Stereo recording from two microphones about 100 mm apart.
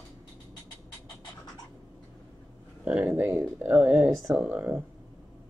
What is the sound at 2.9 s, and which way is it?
Speech, 10° right (ahead or behind).